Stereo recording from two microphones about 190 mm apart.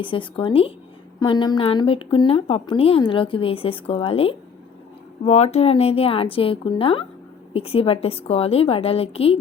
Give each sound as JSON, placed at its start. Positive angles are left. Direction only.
{"t": 0.0, "sound": "a woman's voice", "side_deg": 25}